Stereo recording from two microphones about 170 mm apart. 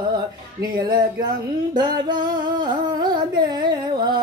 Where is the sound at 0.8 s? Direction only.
25° right (ahead or behind).